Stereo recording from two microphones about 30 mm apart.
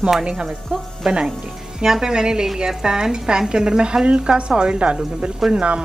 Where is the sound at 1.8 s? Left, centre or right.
Centre.